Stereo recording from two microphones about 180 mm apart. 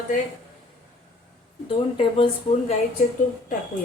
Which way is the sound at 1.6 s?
30° left (ahead or behind).